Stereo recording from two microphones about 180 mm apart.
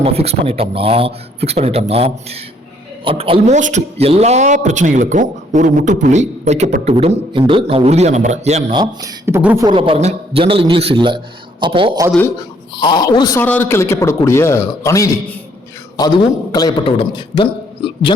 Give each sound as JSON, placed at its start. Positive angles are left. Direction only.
{"t": 0.0, "sound": "a man's voice", "side_deg": -35}
{"t": 8.7, "sound": "speech", "side_deg": -20}
{"t": 9.6, "sound": "a man's voice", "side_deg": -30}
{"t": 12.4, "sound": "a man's voice", "side_deg": 25}
{"t": 13.4, "sound": "a man's voice", "side_deg": 10}